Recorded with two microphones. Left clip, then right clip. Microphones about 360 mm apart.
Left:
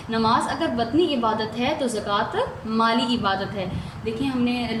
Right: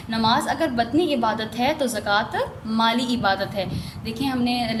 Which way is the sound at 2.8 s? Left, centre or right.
Right.